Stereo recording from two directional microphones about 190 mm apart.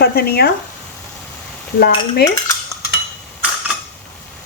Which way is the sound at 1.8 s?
55° left (ahead or behind).